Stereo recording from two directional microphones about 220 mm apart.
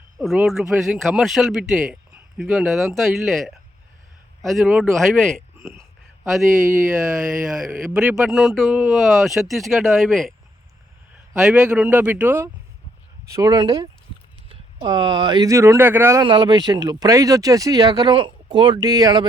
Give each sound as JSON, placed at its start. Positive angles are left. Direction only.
{"t": 0.2, "sound": "speech", "side_deg": 0}
{"t": 5.5, "sound": "speech", "side_deg": -10}
{"t": 7.1, "sound": "speech", "side_deg": 0}
{"t": 11.4, "sound": "speech", "side_deg": -5}